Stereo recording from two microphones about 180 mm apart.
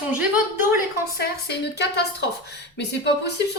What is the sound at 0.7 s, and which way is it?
Speech, 60° left (ahead or behind).